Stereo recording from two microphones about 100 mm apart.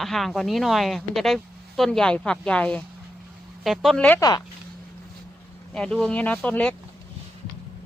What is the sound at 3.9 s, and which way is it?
Speech, 15° left (ahead or behind).